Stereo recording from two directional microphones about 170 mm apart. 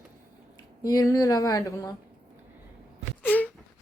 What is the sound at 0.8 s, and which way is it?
Speech, 20° left (ahead or behind).